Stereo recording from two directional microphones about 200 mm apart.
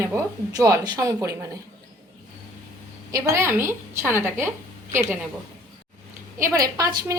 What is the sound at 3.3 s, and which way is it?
A woman's voice, 10° right (ahead or behind).